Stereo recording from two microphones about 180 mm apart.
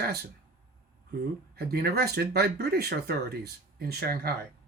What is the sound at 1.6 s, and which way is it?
Speech, 60° right (ahead or behind).